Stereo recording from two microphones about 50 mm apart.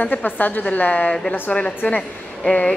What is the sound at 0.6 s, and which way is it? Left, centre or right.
Speech, left.